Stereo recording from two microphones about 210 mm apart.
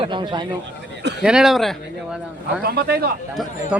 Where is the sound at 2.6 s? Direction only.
45° right (ahead or behind).